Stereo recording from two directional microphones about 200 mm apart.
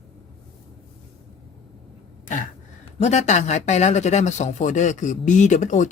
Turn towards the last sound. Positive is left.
turn(degrees=35)  # may be behind; listen again after turning